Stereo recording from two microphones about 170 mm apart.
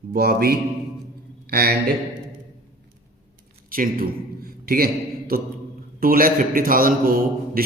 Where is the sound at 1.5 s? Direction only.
65° right (ahead or behind).